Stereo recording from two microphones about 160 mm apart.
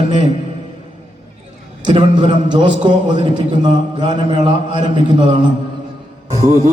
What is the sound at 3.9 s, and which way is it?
A man's voice, 30° right (ahead or behind).